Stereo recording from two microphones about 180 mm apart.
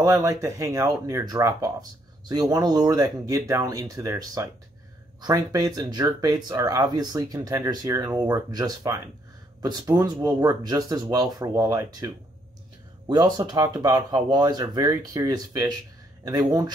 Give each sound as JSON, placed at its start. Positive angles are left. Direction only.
{"t": 0.0, "sound": "speech", "side_deg": -20}
{"t": 13.1, "sound": "speech", "side_deg": -20}